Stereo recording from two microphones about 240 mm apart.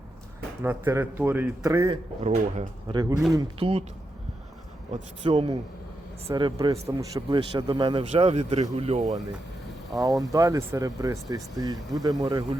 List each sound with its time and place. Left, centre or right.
0.6 s speech: centre
5.2 s speech: right
10.0 s speech: centre